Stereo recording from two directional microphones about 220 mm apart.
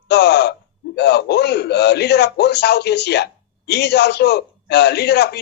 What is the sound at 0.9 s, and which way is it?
A man's voice, 50° left (ahead or behind).